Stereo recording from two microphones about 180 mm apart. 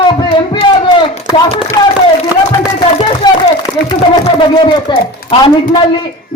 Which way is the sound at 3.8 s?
25° left (ahead or behind).